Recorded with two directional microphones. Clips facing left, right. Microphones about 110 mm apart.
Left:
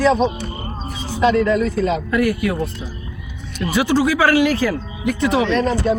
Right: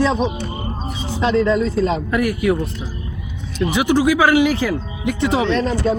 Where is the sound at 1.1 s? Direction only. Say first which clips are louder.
Left 1 dB; 25° right (ahead or behind).